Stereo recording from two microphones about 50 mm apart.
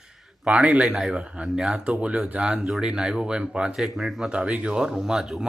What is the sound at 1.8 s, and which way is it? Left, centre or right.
A man's voice, right.